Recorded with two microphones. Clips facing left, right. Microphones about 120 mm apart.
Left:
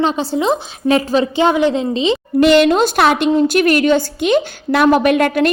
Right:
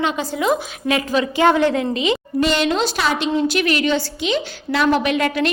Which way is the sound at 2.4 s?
60° left (ahead or behind).